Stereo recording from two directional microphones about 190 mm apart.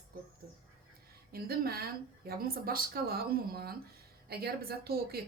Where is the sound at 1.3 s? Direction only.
55° right (ahead or behind).